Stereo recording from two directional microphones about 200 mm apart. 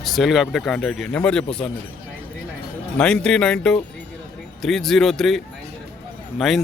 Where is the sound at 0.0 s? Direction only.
Centre (ahead or behind).